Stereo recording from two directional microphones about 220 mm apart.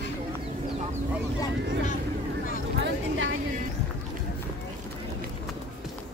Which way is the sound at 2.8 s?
60° right (ahead or behind).